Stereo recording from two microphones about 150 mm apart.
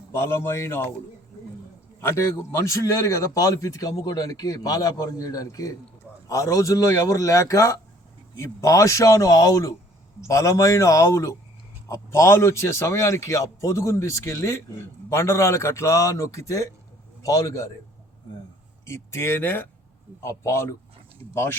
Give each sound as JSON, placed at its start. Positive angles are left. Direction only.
{"t": 0.1, "sound": "speech", "side_deg": 15}
{"t": 2.0, "sound": "a man's voice", "side_deg": 20}
{"t": 18.9, "sound": "speech", "side_deg": 15}